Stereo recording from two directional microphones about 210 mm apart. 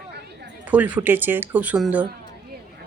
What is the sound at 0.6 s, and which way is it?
A woman's voice, 5° right (ahead or behind).